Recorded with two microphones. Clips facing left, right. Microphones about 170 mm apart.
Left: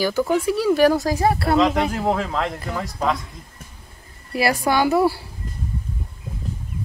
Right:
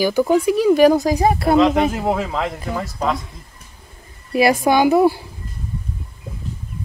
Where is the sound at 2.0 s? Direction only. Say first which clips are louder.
Right 1 dB; 5° right (ahead or behind).